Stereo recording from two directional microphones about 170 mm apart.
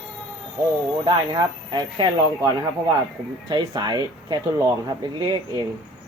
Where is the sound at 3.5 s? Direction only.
25° right (ahead or behind).